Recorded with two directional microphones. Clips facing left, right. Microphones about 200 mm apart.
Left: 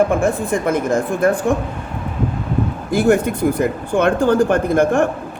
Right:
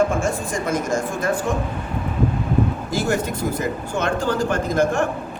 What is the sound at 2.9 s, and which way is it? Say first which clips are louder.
Speech: left 10 dB; 55° left (ahead or behind).